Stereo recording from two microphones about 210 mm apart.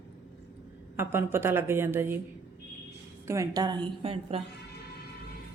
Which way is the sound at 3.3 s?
15° right (ahead or behind).